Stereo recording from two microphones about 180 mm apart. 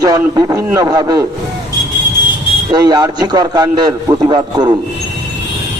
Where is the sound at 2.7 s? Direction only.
20° right (ahead or behind).